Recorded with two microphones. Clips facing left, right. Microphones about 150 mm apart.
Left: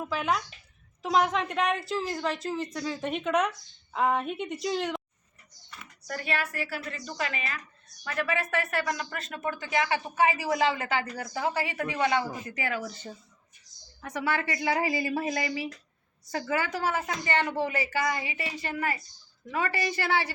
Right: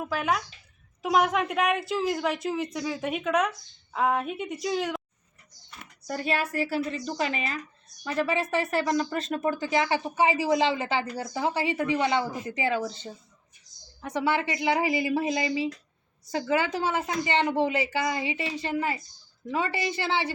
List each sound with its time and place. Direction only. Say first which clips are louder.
0.0 s a woman's voice: right 1 dB; 5° right (ahead or behind)
6.1 s a woman's voice: right 4 dB; 30° right (ahead or behind)